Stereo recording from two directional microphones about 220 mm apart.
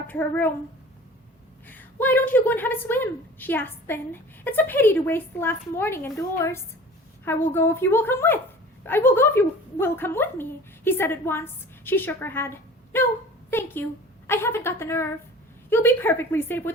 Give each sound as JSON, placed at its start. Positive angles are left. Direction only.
{"t": 0.1, "sound": "a woman's voice", "side_deg": 10}
{"t": 1.6, "sound": "a woman's voice", "side_deg": 10}